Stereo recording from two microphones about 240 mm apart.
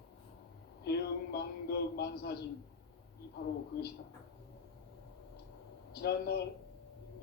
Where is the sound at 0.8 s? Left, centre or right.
Left.